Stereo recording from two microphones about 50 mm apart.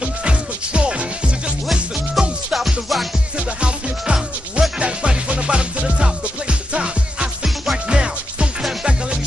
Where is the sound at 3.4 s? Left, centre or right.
Right.